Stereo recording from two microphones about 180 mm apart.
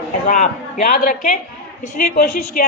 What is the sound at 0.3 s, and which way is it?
A man's voice, 45° left (ahead or behind).